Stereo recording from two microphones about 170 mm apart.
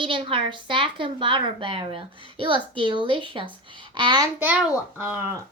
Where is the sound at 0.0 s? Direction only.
30° right (ahead or behind).